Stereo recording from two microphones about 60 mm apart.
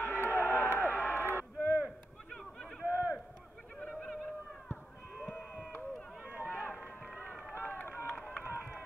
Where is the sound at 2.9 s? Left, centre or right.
Right.